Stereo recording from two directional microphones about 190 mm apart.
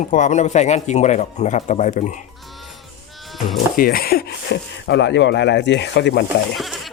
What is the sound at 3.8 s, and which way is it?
Speech, 50° left (ahead or behind).